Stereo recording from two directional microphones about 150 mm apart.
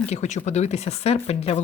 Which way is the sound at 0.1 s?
50° left (ahead or behind).